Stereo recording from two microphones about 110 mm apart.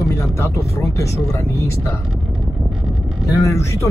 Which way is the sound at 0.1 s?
30° left (ahead or behind).